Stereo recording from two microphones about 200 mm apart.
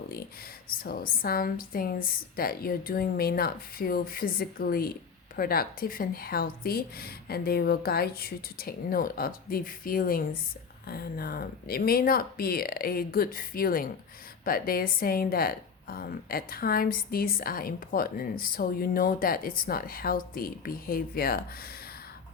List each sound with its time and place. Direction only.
0.9 s a woman's voice: 45° left (ahead or behind)